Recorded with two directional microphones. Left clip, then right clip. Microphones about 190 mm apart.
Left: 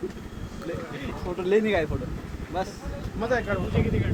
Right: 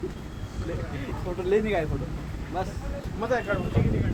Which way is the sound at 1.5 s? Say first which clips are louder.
Left 2 dB; 55° left (ahead or behind).